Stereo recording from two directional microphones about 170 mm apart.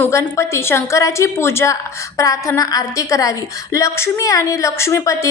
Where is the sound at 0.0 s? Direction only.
15° left (ahead or behind).